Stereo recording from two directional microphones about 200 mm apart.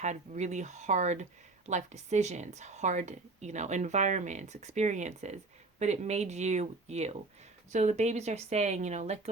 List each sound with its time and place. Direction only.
0.0 s speech: 35° right (ahead or behind)